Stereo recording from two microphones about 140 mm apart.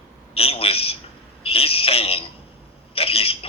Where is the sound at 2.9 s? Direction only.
45° left (ahead or behind).